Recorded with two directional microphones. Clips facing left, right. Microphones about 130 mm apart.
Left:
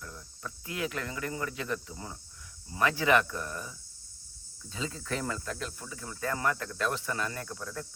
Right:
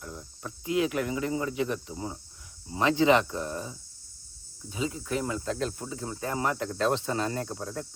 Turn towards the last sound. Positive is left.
turn(degrees=-30)  # may be behind; listen again after turning